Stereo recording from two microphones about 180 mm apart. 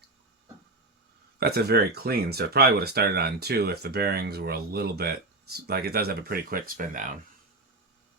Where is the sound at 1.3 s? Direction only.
60° right (ahead or behind).